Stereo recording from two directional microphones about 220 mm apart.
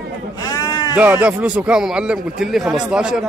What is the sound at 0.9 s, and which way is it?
A man's voice, 10° right (ahead or behind).